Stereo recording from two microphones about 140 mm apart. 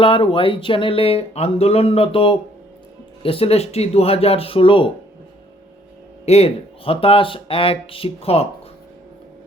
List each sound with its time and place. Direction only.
0.0 s speech: 40° left (ahead or behind)
6.2 s speech: 50° left (ahead or behind)